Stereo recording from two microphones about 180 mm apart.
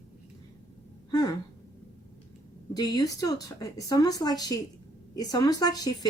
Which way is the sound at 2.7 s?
20° left (ahead or behind).